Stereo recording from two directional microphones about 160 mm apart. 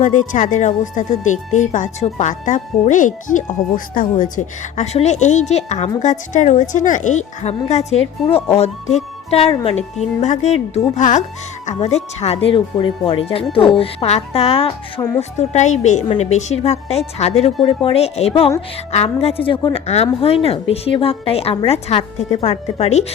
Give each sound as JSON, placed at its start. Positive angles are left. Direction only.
{"t": 0.0, "sound": "a woman's voice", "side_deg": 50}
{"t": 15.2, "sound": "a woman's voice", "side_deg": 45}